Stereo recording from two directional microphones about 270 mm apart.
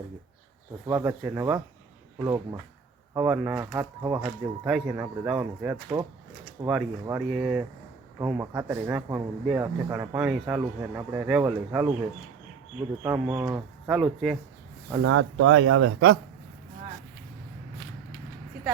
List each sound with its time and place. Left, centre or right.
0.9 s speech: centre
13.0 s speech: centre
15.0 s speech: right